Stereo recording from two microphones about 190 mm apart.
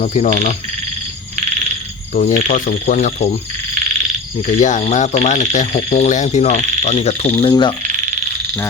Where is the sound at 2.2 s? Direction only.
40° left (ahead or behind).